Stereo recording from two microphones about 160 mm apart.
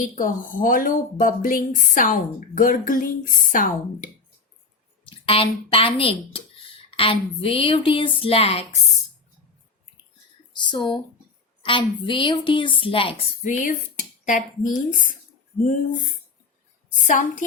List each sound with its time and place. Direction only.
0.0 s a woman's voice: 55° left (ahead or behind)
5.0 s speech: 35° left (ahead or behind)
10.5 s a sound: 30° left (ahead or behind)
11.6 s speech: 30° left (ahead or behind)
13.4 s a woman's voice: 55° left (ahead or behind)